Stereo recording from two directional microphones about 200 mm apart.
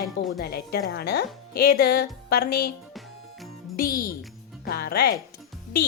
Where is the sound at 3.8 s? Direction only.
45° left (ahead or behind).